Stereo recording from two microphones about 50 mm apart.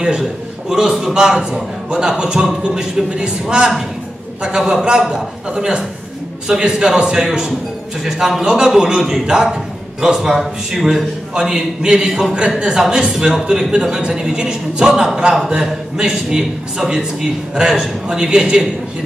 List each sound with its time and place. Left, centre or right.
0.0 s a man's voice: centre
11.3 s a man's voice: centre